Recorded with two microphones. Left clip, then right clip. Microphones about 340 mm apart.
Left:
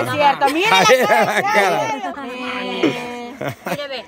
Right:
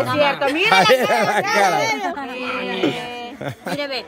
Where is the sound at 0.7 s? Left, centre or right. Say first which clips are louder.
Left 2 dB; centre.